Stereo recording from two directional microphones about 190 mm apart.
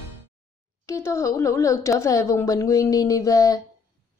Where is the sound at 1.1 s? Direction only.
15° left (ahead or behind).